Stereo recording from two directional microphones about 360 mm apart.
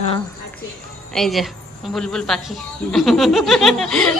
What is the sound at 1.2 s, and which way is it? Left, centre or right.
Speech, centre.